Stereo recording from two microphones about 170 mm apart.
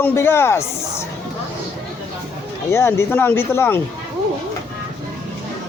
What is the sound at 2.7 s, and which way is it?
Speech, 15° left (ahead or behind).